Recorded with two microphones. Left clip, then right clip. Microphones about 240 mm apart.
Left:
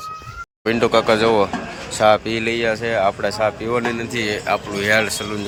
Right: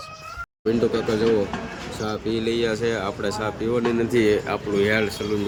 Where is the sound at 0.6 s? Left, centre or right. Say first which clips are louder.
Left 6 dB; centre.